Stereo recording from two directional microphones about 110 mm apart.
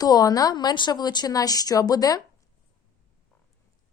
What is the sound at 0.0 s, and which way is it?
Speech, 35° left (ahead or behind).